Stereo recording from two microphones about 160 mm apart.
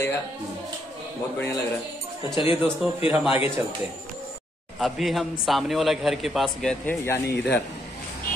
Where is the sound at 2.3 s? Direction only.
35° left (ahead or behind).